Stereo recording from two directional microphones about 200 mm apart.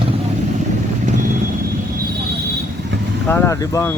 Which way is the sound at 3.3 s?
15° left (ahead or behind).